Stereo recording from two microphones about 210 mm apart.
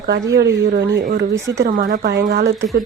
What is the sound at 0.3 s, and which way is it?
Speech, 55° right (ahead or behind).